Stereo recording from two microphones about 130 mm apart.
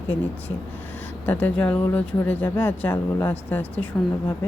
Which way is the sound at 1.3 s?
15° left (ahead or behind).